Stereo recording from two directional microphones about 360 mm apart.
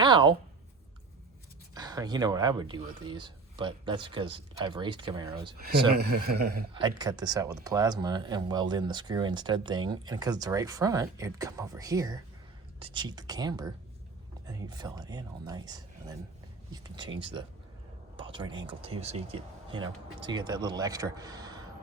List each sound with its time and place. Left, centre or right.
0.0 s a sound: centre
1.7 s speech: centre
5.5 s speech: right
6.7 s speech: centre